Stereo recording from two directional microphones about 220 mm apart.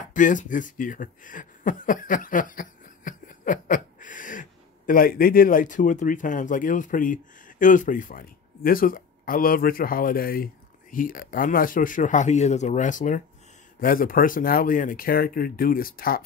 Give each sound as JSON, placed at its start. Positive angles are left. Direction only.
{"t": 0.1, "sound": "speech", "side_deg": 35}